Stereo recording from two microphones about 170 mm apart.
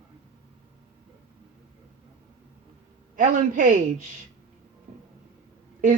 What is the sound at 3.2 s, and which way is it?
Speech, 50° right (ahead or behind).